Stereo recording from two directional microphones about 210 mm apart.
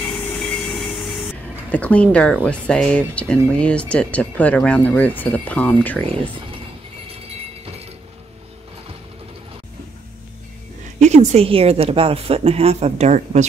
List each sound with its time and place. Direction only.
0.4 s train: centre (ahead or behind)
1.7 s speech: 5° left (ahead or behind)
11.0 s a woman's voice: 30° right (ahead or behind)